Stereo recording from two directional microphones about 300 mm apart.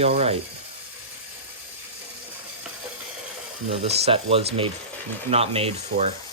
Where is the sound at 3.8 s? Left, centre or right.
Centre.